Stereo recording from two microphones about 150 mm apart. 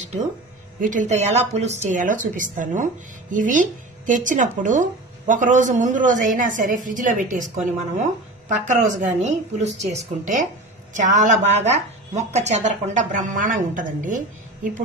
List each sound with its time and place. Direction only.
0.7 s a woman's voice: 60° right (ahead or behind)